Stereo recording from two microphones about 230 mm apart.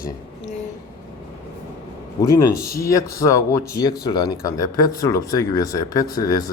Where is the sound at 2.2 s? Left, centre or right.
Centre.